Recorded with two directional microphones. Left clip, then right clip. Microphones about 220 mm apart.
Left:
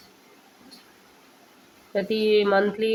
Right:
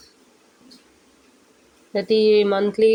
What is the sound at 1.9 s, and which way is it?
Speech, 25° right (ahead or behind).